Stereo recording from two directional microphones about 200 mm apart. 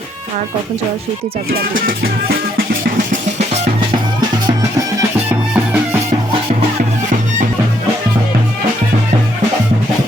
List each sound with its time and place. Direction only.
1.7 s music: 45° right (ahead or behind)
3.1 s music: 35° right (ahead or behind)
5.3 s music: 10° right (ahead or behind)